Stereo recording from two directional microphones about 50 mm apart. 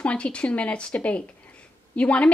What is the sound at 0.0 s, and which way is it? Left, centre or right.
A woman's voice, left.